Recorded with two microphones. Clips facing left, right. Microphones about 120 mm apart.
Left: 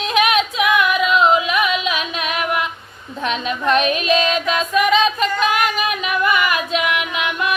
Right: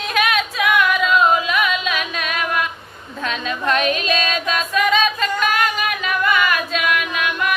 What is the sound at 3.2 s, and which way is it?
Music, 20° left (ahead or behind).